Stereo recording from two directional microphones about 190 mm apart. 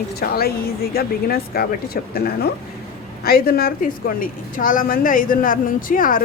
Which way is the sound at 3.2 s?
50° left (ahead or behind).